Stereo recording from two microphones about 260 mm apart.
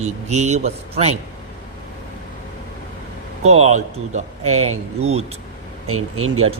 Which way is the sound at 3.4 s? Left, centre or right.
Right.